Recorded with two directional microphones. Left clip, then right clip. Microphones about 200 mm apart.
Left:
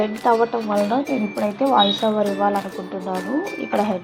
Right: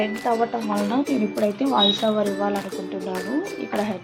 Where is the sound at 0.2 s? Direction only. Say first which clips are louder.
Left 6 dB; 15° left (ahead or behind).